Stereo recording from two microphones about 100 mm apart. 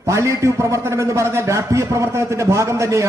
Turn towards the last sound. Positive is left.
turn(degrees=-30)  # may be behind; listen again after turning